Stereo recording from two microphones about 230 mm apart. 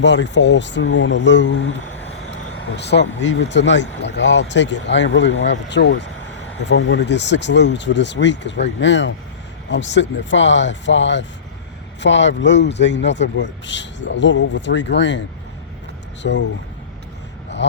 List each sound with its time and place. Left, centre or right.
0.0 s speech: left
2.7 s speech: left
16.2 s speech: left
17.6 s speech: left